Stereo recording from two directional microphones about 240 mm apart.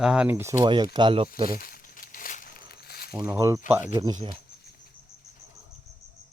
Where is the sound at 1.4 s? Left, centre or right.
Left.